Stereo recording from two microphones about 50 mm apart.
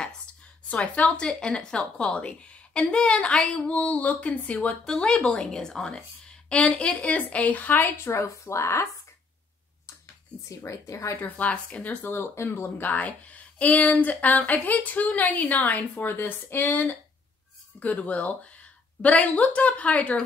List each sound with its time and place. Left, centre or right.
0.7 s a woman's voice: left
4.8 s a woman's voice: centre; by 8.8 s left
10.6 s speech: left
11.2 s speech: left
12.1 s speech: left
12.9 s speech: left
17.7 s a woman's voice: left